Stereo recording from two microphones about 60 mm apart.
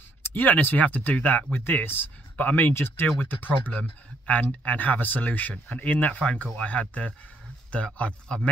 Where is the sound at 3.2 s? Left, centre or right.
Left.